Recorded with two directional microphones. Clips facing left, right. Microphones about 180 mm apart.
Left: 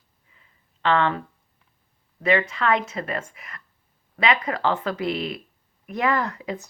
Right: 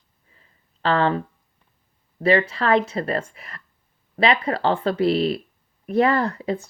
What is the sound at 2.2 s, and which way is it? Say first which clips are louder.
Speech: right 3 dB; 35° right (ahead or behind).